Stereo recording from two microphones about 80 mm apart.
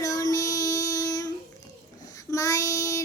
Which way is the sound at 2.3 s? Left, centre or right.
Left.